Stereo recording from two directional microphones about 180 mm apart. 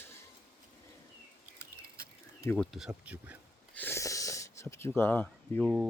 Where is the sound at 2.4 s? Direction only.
10° left (ahead or behind).